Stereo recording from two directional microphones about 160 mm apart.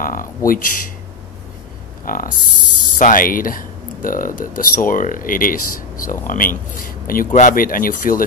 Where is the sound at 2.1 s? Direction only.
60° left (ahead or behind).